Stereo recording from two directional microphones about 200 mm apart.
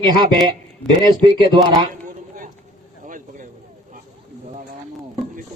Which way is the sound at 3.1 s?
40° right (ahead or behind).